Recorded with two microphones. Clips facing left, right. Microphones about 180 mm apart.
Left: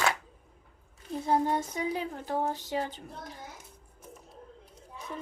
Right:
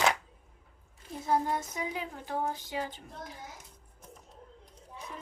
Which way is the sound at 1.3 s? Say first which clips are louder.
Left 2 dB; 30° left (ahead or behind).